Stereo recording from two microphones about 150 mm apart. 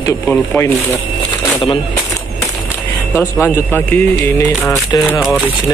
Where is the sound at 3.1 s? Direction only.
15° left (ahead or behind).